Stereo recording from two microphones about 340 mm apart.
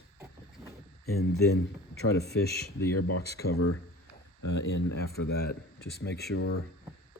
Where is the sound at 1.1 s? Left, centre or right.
Left.